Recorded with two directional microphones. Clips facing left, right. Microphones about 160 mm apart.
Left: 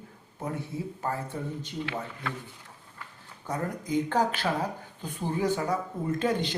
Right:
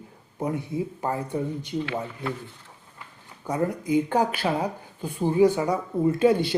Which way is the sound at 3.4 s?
10° right (ahead or behind).